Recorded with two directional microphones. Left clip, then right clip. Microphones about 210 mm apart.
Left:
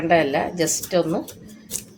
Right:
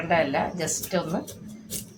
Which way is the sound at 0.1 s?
50° left (ahead or behind).